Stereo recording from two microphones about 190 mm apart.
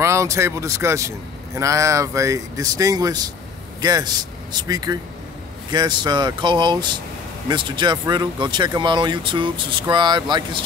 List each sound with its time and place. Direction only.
0.0 s a man's voice: 15° right (ahead or behind)